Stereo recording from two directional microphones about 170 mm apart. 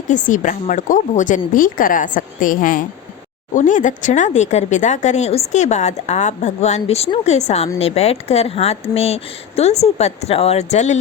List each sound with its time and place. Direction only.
0.1 s speech: 50° left (ahead or behind)